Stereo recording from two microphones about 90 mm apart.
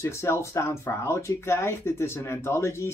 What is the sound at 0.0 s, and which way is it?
Speech, 30° left (ahead or behind).